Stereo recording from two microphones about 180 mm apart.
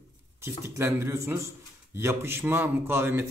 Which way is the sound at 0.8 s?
15° right (ahead or behind).